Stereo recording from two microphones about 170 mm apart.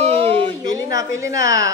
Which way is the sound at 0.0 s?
35° right (ahead or behind).